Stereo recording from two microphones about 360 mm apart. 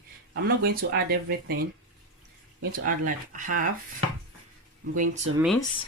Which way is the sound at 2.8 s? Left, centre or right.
Right.